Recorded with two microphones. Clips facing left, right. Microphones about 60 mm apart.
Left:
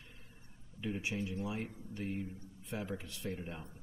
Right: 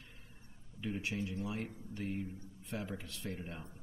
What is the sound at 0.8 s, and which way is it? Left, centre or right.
Speech, centre.